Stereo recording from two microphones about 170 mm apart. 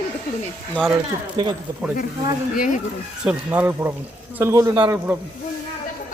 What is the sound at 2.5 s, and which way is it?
Speech, 50° left (ahead or behind).